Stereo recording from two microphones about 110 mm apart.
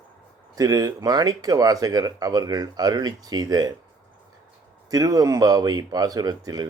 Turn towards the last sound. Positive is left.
turn(degrees=-35)  # may be behind; listen again after turning